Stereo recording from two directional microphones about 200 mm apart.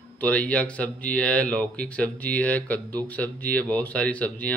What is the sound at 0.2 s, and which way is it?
Speech, 5° left (ahead or behind).